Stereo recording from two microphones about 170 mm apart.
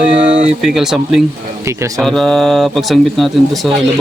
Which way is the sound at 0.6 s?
5° right (ahead or behind).